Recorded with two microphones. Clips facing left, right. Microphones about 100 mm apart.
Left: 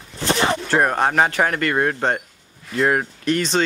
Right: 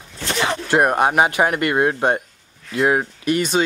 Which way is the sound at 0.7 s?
15° right (ahead or behind).